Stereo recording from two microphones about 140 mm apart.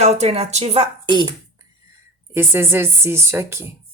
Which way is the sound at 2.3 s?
15° right (ahead or behind).